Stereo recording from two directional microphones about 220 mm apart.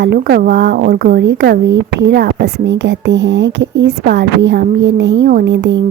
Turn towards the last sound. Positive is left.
turn(degrees=-55)  # may be behind; listen again after turning